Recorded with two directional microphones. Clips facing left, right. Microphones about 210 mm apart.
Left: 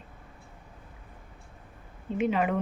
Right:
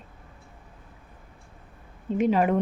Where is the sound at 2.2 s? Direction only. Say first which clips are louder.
Right 4 dB; 40° right (ahead or behind).